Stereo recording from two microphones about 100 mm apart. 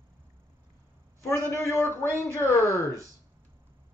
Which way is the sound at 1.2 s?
30° left (ahead or behind).